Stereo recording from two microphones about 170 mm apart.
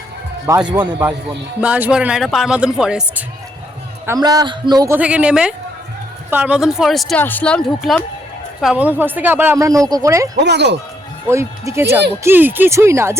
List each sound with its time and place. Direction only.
0.5 s speech: 15° right (ahead or behind)
4.0 s a man's voice: 20° right (ahead or behind)
4.9 s speech: 5° right (ahead or behind)
8.6 s speech: 10° right (ahead or behind)
10.4 s speech: 85° right
11.3 s speech: 15° right (ahead or behind)